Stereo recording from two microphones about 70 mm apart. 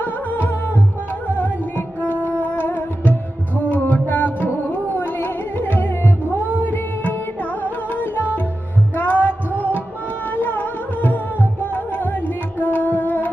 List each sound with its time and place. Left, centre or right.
0.0 s music: left
2.0 s music: left